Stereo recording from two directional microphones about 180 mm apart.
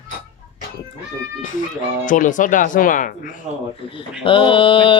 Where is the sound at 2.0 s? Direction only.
45° left (ahead or behind).